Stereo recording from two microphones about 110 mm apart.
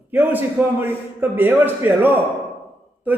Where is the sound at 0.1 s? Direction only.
15° right (ahead or behind).